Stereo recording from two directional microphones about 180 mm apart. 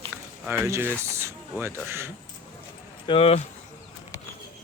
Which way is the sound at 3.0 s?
30° left (ahead or behind).